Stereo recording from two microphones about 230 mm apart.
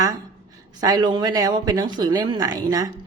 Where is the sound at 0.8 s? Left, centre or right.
Centre.